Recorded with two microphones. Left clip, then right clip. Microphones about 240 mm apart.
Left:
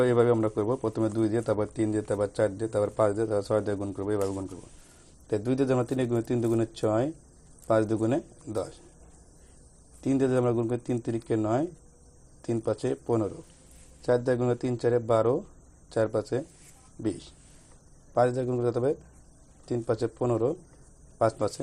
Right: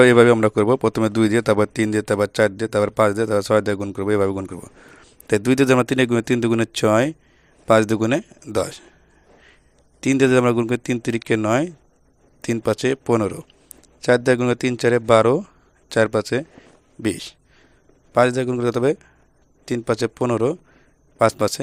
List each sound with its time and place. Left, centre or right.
0.0 s a man's voice: right
10.0 s a man's voice: right